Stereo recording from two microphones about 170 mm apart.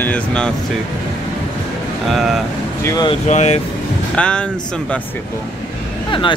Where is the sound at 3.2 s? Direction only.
40° left (ahead or behind).